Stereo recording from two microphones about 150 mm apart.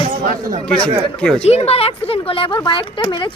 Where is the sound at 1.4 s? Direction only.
45° left (ahead or behind).